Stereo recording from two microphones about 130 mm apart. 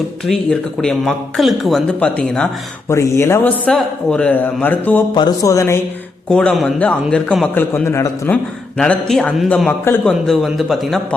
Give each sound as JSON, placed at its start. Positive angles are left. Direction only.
{"t": 0.8, "sound": "a man's voice", "side_deg": 5}
{"t": 1.9, "sound": "a man's voice", "side_deg": 10}
{"t": 2.9, "sound": "speech", "side_deg": 20}
{"t": 3.7, "sound": "a man's voice", "side_deg": 5}
{"t": 5.1, "sound": "speech", "side_deg": 30}
{"t": 6.2, "sound": "a man's voice", "side_deg": 5}
{"t": 8.8, "sound": "a man's voice", "side_deg": 5}